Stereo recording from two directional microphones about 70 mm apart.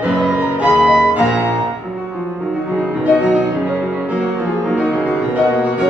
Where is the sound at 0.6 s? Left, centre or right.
Centre.